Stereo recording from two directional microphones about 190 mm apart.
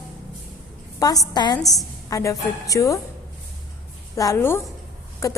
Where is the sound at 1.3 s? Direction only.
20° left (ahead or behind).